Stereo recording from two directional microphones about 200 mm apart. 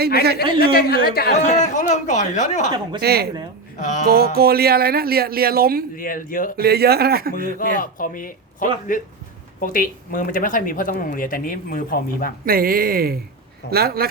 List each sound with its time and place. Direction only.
0.6 s speech: 50° left (ahead or behind)
1.4 s speech: 35° left (ahead or behind)
3.0 s speech: 50° right (ahead or behind)
3.8 s speech: 35° left (ahead or behind)
4.1 s speech: 50° right (ahead or behind)
6.0 s speech: 45° left (ahead or behind)
6.6 s speech: 50° right (ahead or behind)
7.8 s speech: 45° left (ahead or behind)
12.5 s speech: 45° right (ahead or behind)